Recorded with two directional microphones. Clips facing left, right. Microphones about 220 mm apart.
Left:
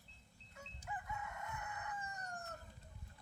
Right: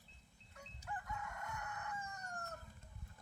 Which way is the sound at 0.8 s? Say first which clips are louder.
Even; 5° left (ahead or behind).